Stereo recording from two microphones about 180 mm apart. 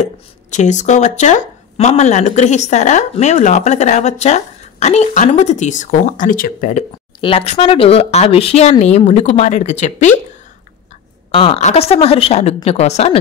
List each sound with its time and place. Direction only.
0.0 s speech: 40° left (ahead or behind)
7.2 s speech: 30° left (ahead or behind)
11.3 s speech: 30° left (ahead or behind)